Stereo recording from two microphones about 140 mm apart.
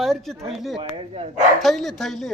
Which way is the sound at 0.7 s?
40° right (ahead or behind).